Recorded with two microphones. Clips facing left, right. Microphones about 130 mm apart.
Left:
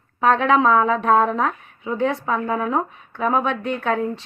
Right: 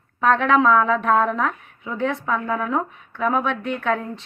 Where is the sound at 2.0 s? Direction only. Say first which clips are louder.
Left 1 dB; 5° left (ahead or behind).